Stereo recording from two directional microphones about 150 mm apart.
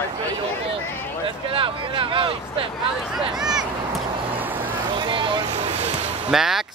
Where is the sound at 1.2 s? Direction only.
35° right (ahead or behind).